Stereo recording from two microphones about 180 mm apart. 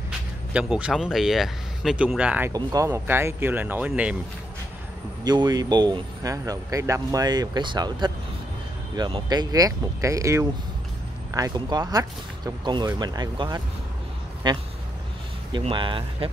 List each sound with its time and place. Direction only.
0.5 s speech: 5° right (ahead or behind)
2.5 s speech: 20° right (ahead or behind)
5.2 s speech: 25° right (ahead or behind)